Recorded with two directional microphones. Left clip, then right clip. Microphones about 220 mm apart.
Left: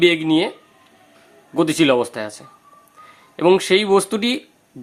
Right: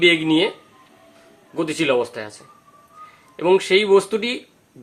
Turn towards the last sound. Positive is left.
turn(degrees=50)  # may be behind; listen again after turning